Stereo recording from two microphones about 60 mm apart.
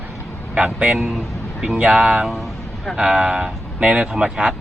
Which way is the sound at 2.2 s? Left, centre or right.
Centre.